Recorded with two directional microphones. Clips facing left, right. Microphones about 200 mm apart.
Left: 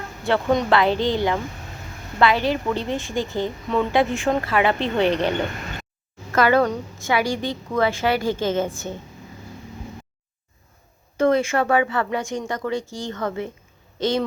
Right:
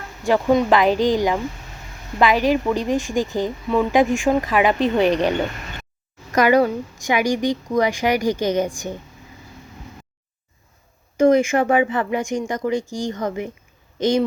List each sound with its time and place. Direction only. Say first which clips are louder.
0.2 s a woman's voice: right 3 dB; 15° right (ahead or behind)
6.3 s a woman's voice: right 2 dB; 15° right (ahead or behind)
11.2 s a woman's voice: right 4 dB; 15° right (ahead or behind)